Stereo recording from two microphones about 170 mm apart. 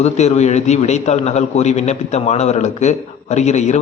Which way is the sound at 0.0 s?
40° left (ahead or behind).